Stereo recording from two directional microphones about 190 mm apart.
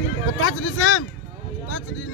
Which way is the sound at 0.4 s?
90° left.